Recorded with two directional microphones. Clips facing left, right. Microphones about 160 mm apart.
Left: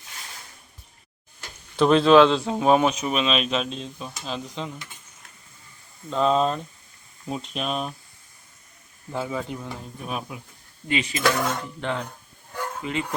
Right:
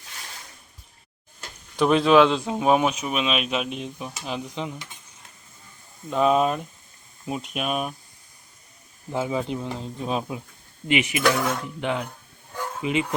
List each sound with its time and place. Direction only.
1.8 s speech: 10° right (ahead or behind)
6.1 s speech: 10° right (ahead or behind)
9.1 s speech: 20° right (ahead or behind)
11.3 s cutlery: 5° right (ahead or behind)
11.8 s speech: 15° right (ahead or behind)
12.5 s a sound: 5° right (ahead or behind)
12.8 s speech: 15° right (ahead or behind)